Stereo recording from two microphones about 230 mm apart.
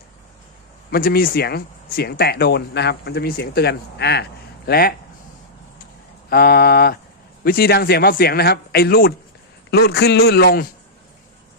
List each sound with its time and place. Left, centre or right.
0.9 s speech: left
6.3 s a sound: left
7.4 s speech: left